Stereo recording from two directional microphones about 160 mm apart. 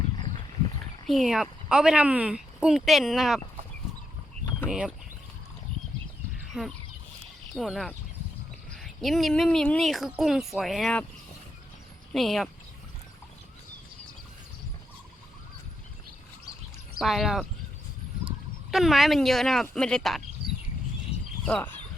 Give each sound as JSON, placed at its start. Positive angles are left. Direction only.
{"t": 1.0, "sound": "speech", "side_deg": 0}
{"t": 4.7, "sound": "speech", "side_deg": -5}
{"t": 6.5, "sound": "speech", "side_deg": 0}
{"t": 7.2, "sound": "a sound", "side_deg": 0}
{"t": 8.7, "sound": "speech", "side_deg": 0}
{"t": 12.1, "sound": "speech", "side_deg": 0}
{"t": 17.0, "sound": "speech", "side_deg": 0}
{"t": 18.7, "sound": "speech", "side_deg": 0}
{"t": 21.1, "sound": "a sound", "side_deg": 40}
{"t": 21.4, "sound": "speech", "side_deg": 10}